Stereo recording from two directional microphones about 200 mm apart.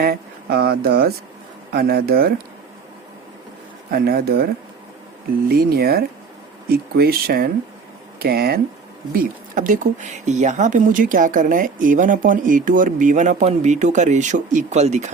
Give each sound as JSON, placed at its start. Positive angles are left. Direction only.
{"t": 0.0, "sound": "speech", "side_deg": -50}
{"t": 3.9, "sound": "speech", "side_deg": -50}
{"t": 5.5, "sound": "speech", "side_deg": -50}